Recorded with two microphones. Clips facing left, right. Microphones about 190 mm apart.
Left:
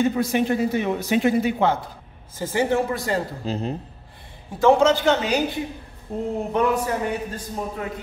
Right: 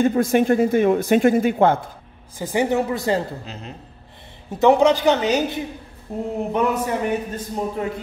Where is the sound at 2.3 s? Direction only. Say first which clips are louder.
Right 1 dB; 15° right (ahead or behind).